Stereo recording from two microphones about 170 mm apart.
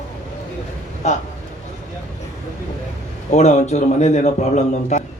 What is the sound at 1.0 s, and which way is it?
Speech, 40° left (ahead or behind).